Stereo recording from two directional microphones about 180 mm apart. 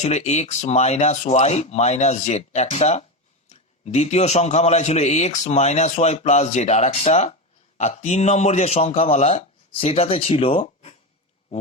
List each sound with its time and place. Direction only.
0.0 s a man's voice: 40° left (ahead or behind)